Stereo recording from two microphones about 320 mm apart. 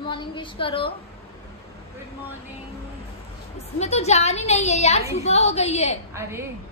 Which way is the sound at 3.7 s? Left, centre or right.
Left.